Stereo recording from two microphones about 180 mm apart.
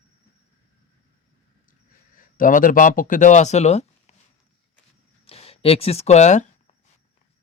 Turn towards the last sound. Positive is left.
turn(degrees=40)  # may be behind; listen again after turning